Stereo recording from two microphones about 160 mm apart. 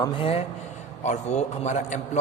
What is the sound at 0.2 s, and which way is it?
A man's voice, 35° left (ahead or behind).